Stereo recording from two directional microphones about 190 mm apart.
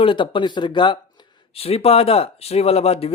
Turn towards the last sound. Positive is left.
turn(degrees=30)  # may be behind; listen again after turning